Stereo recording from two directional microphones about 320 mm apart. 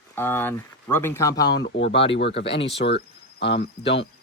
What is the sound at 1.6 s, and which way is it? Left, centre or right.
Speech, left.